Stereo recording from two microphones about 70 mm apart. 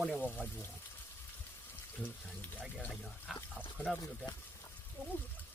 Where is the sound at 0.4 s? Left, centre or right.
Left.